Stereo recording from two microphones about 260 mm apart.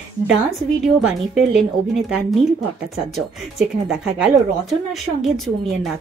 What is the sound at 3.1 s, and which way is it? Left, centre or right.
Speech, centre.